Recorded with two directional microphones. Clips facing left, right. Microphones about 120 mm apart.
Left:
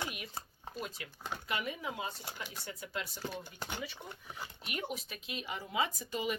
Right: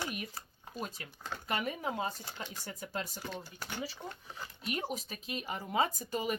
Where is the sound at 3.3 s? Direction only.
20° left (ahead or behind).